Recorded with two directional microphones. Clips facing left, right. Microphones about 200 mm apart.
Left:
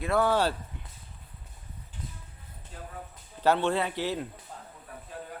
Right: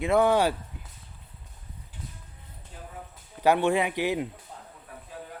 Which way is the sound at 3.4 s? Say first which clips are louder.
Right 3 dB; 10° right (ahead or behind).